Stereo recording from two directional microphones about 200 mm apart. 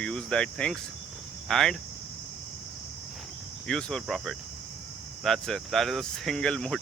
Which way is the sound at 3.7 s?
5° left (ahead or behind).